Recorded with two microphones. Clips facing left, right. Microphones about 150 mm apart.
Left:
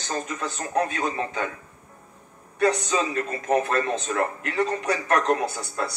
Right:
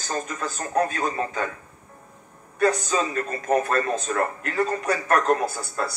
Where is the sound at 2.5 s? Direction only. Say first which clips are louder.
Even; 40° right (ahead or behind).